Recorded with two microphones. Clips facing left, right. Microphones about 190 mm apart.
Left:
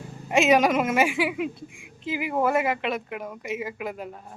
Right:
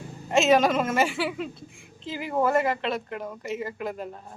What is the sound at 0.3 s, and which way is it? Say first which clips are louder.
Speech: even; 10° left (ahead or behind).